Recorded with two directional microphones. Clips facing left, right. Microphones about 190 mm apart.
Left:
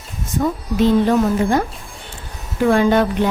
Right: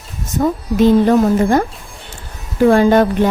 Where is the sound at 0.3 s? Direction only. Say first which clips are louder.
Right 3 dB; 45° right (ahead or behind).